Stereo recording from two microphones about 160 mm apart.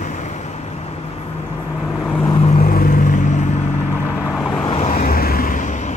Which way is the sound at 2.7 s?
60° left (ahead or behind).